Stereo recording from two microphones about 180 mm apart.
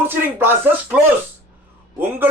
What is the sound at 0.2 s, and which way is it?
Speech, 10° right (ahead or behind).